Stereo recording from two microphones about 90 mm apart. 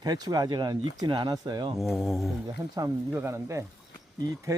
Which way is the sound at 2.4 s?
45° right (ahead or behind).